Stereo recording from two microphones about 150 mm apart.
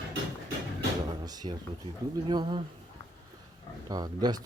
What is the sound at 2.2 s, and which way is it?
Speech, 30° right (ahead or behind).